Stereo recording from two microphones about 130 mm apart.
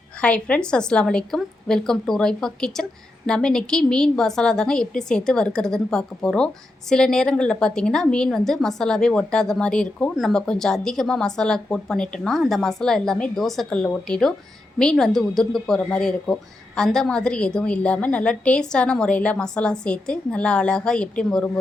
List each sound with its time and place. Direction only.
0.2 s a woman's voice: 10° left (ahead or behind)